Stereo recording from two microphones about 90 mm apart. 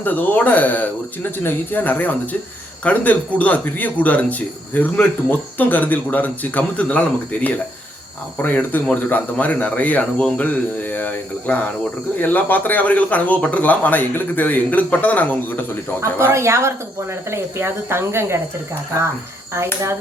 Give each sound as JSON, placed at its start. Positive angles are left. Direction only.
{"t": 0.0, "sound": "speech", "side_deg": 20}
{"t": 8.4, "sound": "speech", "side_deg": 20}
{"t": 16.1, "sound": "a woman's voice", "side_deg": -30}
{"t": 19.5, "sound": "a woman's voice", "side_deg": -30}